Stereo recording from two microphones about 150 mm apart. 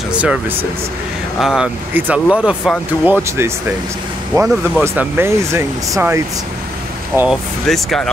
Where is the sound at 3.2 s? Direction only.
15° right (ahead or behind).